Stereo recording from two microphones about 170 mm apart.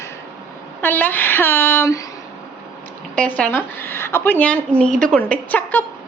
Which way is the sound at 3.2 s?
5° left (ahead or behind).